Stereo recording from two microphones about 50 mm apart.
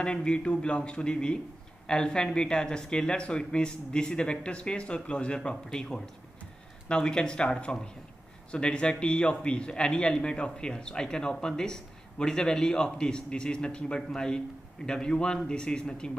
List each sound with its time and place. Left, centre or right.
0.0 s a man's voice: centre